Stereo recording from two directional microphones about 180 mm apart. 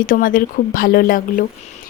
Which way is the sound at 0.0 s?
50° left (ahead or behind).